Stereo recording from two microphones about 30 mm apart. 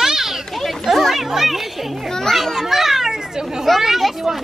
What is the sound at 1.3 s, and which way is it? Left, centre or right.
A child's voice, centre.